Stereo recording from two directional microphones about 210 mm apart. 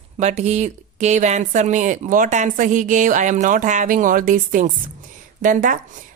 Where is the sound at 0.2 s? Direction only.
35° right (ahead or behind).